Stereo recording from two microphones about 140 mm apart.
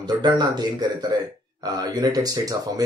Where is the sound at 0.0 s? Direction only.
30° right (ahead or behind).